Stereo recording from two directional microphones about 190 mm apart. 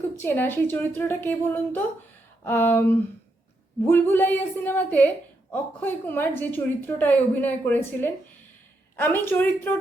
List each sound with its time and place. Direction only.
0.2 s a woman's voice: 10° left (ahead or behind)